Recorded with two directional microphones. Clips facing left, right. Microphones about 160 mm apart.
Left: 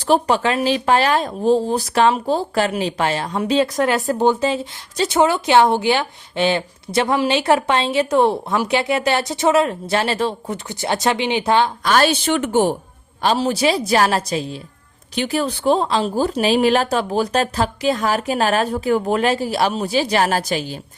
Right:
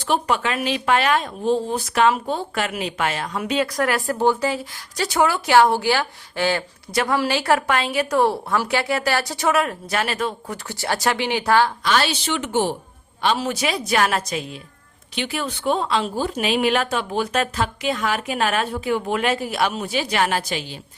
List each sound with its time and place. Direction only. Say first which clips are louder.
0.0 s speech: left 5 dB; 35° left (ahead or behind)
11.8 s a woman's voice: left 5 dB; 45° left (ahead or behind)
13.2 s a woman's voice: left 5 dB; 35° left (ahead or behind)